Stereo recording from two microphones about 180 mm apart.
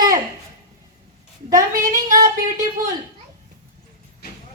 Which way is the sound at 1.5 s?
20° right (ahead or behind).